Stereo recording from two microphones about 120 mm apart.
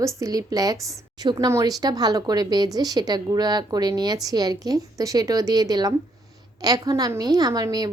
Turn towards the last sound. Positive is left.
turn(degrees=-30)  # may be behind; listen again after turning